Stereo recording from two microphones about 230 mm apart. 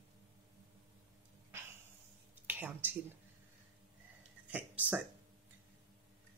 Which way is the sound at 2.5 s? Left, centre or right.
Centre.